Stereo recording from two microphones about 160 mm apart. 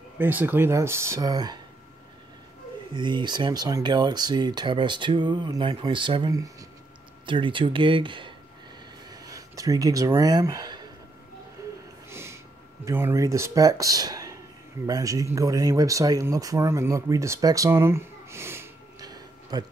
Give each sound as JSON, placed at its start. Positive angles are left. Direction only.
{"t": 0.2, "sound": "speech", "side_deg": -10}
{"t": 2.9, "sound": "speech", "side_deg": -30}
{"t": 11.6, "sound": "snort", "side_deg": -20}
{"t": 12.8, "sound": "speech", "side_deg": -15}